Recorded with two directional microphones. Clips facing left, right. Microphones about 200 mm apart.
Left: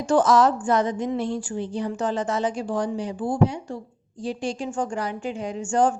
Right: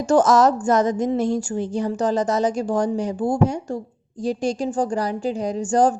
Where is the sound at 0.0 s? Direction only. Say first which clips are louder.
Right 3 dB; 45° right (ahead or behind).